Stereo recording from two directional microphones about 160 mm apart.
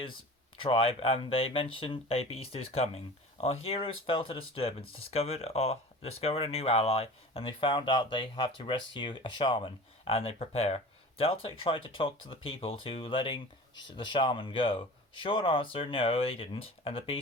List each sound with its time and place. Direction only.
0.6 s speech: 35° left (ahead or behind)